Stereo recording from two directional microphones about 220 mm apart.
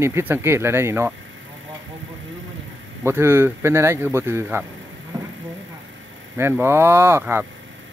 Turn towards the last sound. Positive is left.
turn(degrees=-10)  # may be behind; listen again after turning